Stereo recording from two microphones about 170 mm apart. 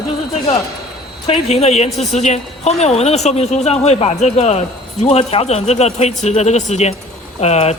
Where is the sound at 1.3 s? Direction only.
40° left (ahead or behind).